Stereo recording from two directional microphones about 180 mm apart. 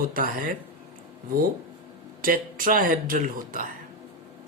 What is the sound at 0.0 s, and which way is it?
Speech, 50° right (ahead or behind).